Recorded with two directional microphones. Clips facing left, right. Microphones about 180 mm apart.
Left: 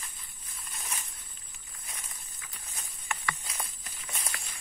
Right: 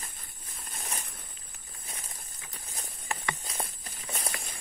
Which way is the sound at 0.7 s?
35° right (ahead or behind).